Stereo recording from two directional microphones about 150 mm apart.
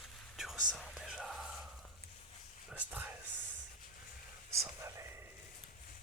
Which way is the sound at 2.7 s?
10° right (ahead or behind).